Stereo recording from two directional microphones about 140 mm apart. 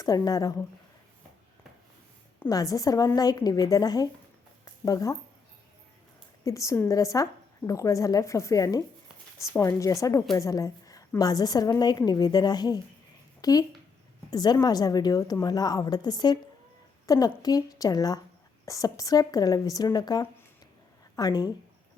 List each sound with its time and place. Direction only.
0.0 s a woman's voice: 25° left (ahead or behind)
2.5 s a woman's voice: 25° left (ahead or behind)
4.6 s a sound: 25° left (ahead or behind)
6.4 s a woman's voice: 20° left (ahead or behind)